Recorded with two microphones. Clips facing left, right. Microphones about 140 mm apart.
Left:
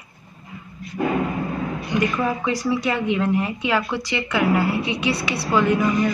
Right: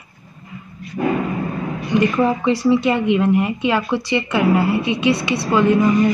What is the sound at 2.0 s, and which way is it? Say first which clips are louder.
A woman's voice: right 5 dB; 25° right (ahead or behind).